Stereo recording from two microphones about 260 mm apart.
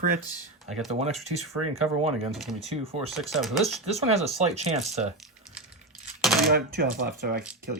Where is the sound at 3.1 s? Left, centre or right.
Centre.